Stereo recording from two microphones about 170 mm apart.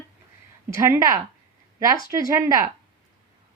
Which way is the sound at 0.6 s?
15° right (ahead or behind).